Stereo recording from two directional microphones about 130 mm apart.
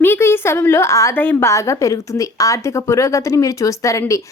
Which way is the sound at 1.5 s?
25° left (ahead or behind).